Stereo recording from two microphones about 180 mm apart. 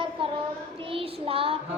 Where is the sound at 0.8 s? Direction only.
30° right (ahead or behind).